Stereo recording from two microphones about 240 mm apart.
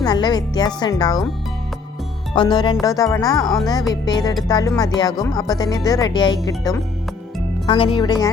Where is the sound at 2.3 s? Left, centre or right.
Centre.